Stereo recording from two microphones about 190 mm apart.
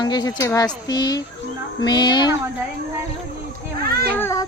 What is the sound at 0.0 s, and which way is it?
Speech, 20° left (ahead or behind).